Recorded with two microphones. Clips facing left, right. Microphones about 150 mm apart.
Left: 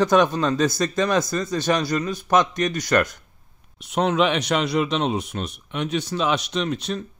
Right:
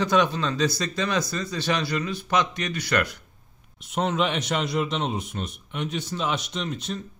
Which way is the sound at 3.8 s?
70° left (ahead or behind).